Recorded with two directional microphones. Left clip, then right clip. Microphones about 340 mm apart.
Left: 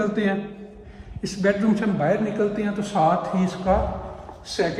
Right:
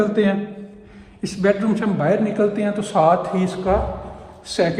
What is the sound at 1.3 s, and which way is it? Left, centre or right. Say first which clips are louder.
A man's voice: right 3 dB; centre.